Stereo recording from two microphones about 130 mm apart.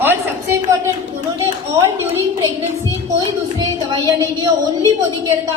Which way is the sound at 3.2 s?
30° right (ahead or behind).